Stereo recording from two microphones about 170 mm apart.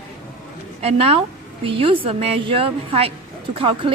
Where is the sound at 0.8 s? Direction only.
35° right (ahead or behind).